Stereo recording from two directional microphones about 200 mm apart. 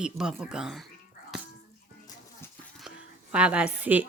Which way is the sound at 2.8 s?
5° right (ahead or behind).